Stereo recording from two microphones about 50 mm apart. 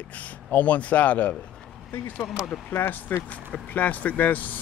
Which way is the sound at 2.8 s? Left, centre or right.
Left.